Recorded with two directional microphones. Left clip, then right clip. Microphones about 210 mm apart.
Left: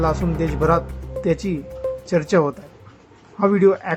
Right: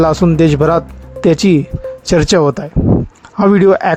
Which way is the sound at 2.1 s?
45° right (ahead or behind).